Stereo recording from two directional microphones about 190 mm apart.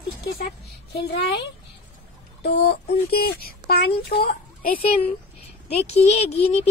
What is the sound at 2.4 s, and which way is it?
Speech, 60° left (ahead or behind).